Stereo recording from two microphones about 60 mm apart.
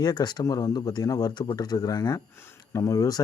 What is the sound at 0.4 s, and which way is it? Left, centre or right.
Speech, left.